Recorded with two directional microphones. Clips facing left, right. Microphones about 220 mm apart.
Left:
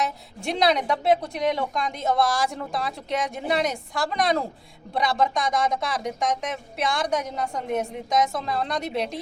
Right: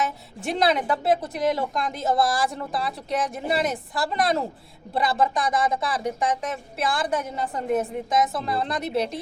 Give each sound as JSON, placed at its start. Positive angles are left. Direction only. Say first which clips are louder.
{"t": 0.4, "sound": "speech", "louder": "even", "side_deg": 0}